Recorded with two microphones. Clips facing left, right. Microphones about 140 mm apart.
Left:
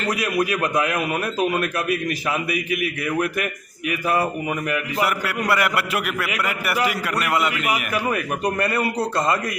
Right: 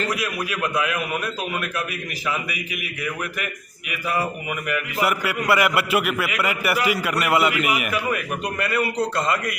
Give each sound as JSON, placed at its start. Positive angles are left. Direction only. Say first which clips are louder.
{"t": 0.9, "sound": "a man's voice", "louder": "left 4 dB", "side_deg": 40}
{"t": 4.9, "sound": "a man's voice", "louder": "right 2 dB", "side_deg": 0}
{"t": 8.1, "sound": "a man's voice", "louder": "left 3 dB", "side_deg": 30}